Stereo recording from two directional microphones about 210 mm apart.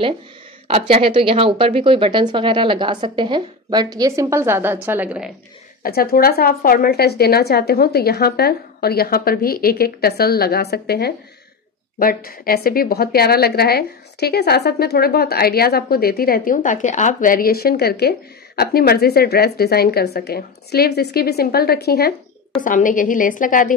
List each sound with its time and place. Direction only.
0.7 s speech: 30° right (ahead or behind); by 5.3 s 5° right (ahead or behind)
5.8 s a woman's voice: 45° left (ahead or behind)
22.5 s a woman's voice: 40° left (ahead or behind)